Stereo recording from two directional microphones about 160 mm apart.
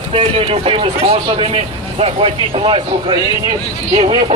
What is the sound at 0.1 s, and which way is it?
Speech, 40° right (ahead or behind).